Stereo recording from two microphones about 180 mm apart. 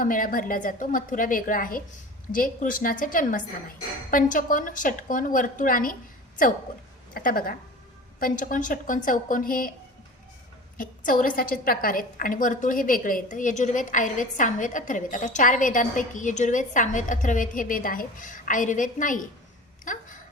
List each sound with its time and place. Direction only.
0.0 s a woman's voice: 50° left (ahead or behind)
10.8 s a woman's voice: 50° left (ahead or behind)
19.8 s a sound: 45° left (ahead or behind)